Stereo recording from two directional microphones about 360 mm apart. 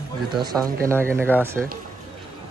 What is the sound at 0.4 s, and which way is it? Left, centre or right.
Speech, centre.